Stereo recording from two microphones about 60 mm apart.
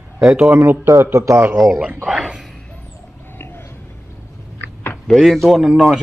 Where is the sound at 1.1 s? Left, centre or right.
Right.